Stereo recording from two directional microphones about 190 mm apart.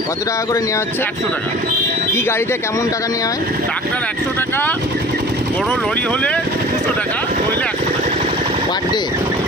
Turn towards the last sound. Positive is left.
turn(degrees=10)  # may be behind; listen again after turning